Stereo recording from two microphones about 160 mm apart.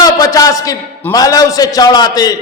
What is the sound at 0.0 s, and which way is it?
A man's voice, 20° left (ahead or behind).